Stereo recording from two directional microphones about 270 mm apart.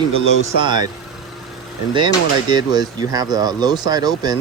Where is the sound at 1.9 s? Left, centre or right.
Centre.